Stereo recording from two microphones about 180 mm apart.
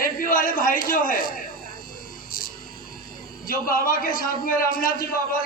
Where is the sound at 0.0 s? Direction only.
50° left (ahead or behind).